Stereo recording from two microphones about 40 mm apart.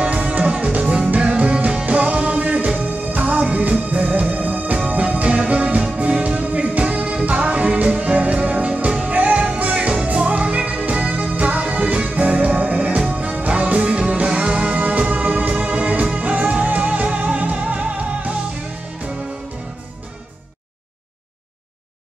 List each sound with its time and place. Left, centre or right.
0.0 s music: right